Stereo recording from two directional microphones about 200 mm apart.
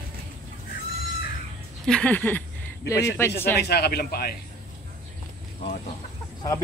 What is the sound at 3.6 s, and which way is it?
Speech, 50° left (ahead or behind).